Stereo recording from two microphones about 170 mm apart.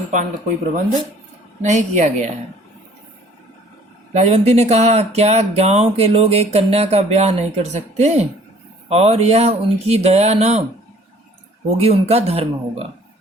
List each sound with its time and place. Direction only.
0.1 s speech: 45° right (ahead or behind)
4.1 s speech: 40° right (ahead or behind)
11.8 s speech: 40° right (ahead or behind)